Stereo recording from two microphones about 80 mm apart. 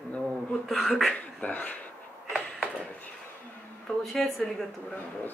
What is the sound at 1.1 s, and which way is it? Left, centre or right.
Speech, centre.